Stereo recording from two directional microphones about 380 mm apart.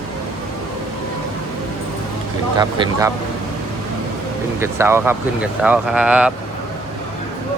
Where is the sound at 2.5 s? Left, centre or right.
Centre.